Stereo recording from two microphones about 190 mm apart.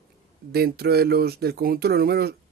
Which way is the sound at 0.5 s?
55° right (ahead or behind).